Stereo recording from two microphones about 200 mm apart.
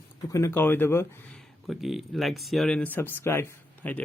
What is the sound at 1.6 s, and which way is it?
Speech, centre (ahead or behind).